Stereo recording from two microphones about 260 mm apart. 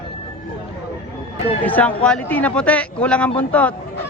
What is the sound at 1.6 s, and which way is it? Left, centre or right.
Speech, centre.